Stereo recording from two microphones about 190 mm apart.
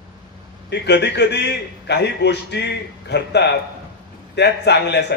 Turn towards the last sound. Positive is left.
turn(degrees=60)  # may be behind; listen again after turning